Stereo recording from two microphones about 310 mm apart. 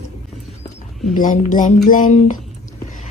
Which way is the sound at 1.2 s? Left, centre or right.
Left.